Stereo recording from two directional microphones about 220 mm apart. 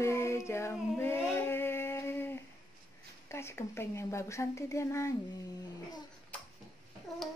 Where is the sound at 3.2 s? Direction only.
10° left (ahead or behind).